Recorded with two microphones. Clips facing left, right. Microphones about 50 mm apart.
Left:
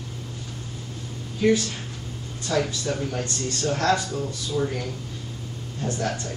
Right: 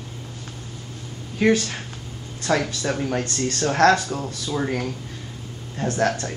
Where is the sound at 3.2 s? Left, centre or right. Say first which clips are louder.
Right 3 dB; right.